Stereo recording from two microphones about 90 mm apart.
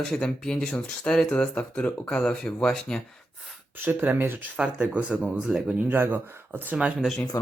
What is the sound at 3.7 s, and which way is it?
Speech, 20° right (ahead or behind).